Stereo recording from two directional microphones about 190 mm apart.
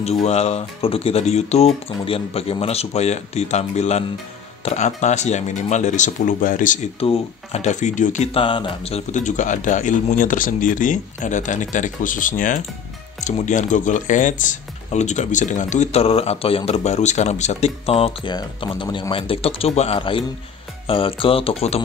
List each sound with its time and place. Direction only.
0.0 s speech: 35° left (ahead or behind)